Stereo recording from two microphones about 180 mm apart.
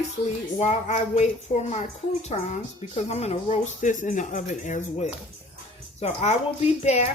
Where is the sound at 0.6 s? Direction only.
40° left (ahead or behind).